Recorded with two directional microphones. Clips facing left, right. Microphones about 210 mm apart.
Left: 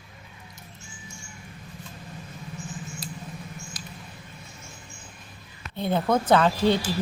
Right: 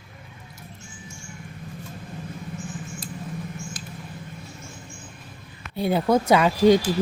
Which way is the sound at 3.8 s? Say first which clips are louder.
Right 3 dB; 55° right (ahead or behind).